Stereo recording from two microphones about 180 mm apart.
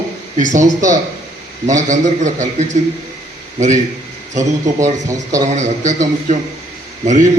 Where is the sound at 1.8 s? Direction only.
45° right (ahead or behind).